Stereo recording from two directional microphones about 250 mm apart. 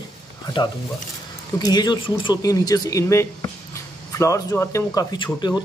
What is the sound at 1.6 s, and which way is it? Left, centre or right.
Speech, centre.